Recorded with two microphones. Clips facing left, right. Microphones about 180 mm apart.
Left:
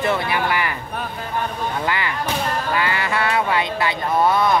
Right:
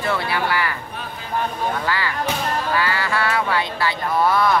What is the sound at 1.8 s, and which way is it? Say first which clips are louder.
Speech: even; 20° left (ahead or behind).